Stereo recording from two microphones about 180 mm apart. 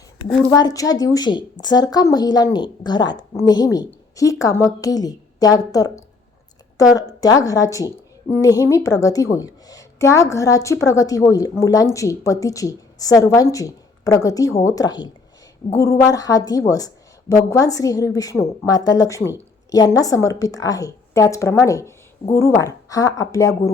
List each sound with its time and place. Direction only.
0.5 s a woman's voice: 20° left (ahead or behind)